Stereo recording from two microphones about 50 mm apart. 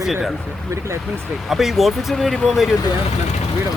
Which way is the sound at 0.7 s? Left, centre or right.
Right.